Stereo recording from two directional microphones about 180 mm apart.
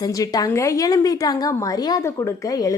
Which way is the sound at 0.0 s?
20° left (ahead or behind).